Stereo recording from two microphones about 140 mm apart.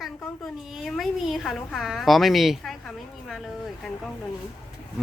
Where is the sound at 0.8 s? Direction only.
Centre (ahead or behind).